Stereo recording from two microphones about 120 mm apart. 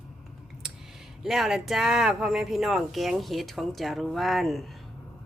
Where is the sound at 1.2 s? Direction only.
5° right (ahead or behind).